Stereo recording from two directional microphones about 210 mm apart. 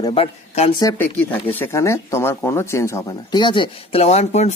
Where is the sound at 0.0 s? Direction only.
25° left (ahead or behind).